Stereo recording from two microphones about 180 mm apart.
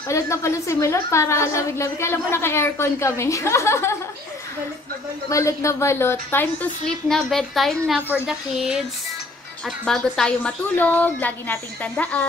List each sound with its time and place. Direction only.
0.1 s a woman's voice: 15° left (ahead or behind)
5.3 s a woman's voice: 15° left (ahead or behind)